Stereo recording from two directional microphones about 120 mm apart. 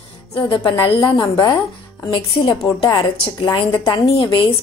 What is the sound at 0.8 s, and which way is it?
A woman's voice, 45° left (ahead or behind).